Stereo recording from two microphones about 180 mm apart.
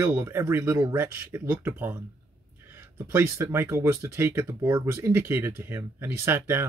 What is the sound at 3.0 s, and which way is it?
Speech, 15° right (ahead or behind).